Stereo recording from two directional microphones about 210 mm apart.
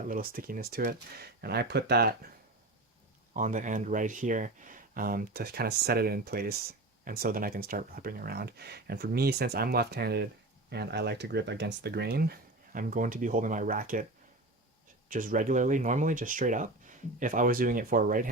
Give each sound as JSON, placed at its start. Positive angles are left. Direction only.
{"t": 0.0, "sound": "speech", "side_deg": -40}
{"t": 3.3, "sound": "speech", "side_deg": -35}
{"t": 15.1, "sound": "speech", "side_deg": -40}